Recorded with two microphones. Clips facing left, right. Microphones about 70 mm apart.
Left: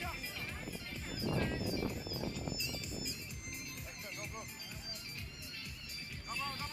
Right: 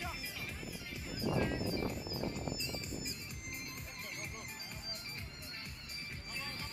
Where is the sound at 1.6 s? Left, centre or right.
Right.